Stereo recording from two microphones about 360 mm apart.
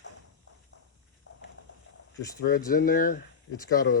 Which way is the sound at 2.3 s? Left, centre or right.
Left.